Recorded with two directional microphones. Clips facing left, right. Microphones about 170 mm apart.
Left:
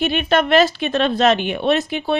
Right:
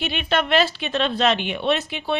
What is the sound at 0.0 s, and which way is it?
A woman's voice, 45° left (ahead or behind).